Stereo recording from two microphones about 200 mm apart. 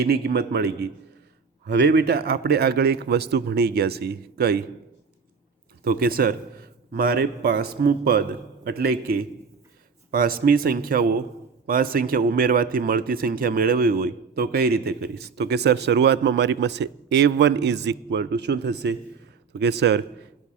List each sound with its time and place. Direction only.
0.0 s a man's voice: 55° right (ahead or behind)
5.8 s a man's voice: 50° right (ahead or behind)